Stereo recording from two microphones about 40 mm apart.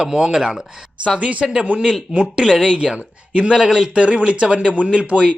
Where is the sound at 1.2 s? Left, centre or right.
Right.